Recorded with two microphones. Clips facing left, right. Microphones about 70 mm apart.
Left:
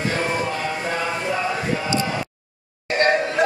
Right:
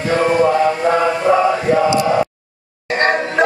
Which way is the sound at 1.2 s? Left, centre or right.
Right.